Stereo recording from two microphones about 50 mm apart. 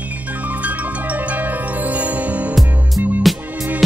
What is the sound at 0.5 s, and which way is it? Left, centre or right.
Music, right.